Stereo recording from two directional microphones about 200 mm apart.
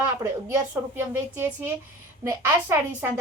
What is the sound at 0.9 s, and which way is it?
A woman's voice, 10° right (ahead or behind).